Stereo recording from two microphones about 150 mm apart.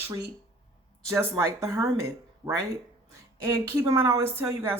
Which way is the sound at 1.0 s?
20° right (ahead or behind).